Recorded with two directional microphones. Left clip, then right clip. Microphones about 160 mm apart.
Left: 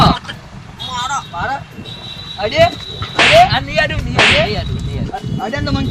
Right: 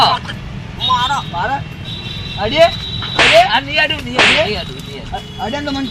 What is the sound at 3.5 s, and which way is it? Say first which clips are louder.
Speech: right 2 dB; 20° left (ahead or behind).